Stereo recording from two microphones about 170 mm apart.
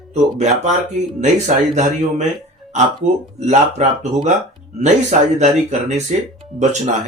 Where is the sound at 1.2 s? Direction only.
45° right (ahead or behind).